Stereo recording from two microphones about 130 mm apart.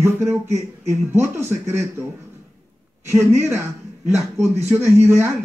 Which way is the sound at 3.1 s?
20° right (ahead or behind).